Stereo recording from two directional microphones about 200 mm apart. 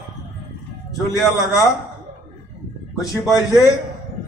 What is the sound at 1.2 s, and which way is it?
Speech, 15° left (ahead or behind).